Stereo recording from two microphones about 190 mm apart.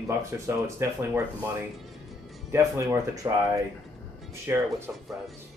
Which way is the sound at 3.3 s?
20° right (ahead or behind).